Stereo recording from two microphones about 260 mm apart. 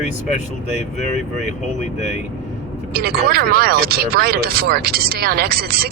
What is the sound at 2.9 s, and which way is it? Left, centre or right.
Speech, right.